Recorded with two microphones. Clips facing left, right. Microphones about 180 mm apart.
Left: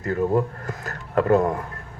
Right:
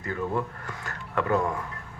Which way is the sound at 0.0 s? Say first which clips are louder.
Left 8 dB; 45° left (ahead or behind).